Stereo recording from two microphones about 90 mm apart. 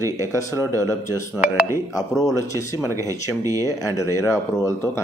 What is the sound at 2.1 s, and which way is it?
Speech, 35° left (ahead or behind).